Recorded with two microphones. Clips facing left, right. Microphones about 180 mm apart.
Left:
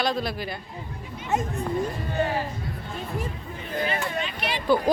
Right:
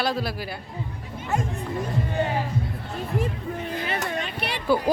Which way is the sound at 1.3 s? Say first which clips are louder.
Left 1 dB; 20° left (ahead or behind).